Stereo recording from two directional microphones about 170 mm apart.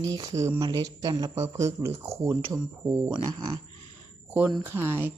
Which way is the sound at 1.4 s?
20° right (ahead or behind).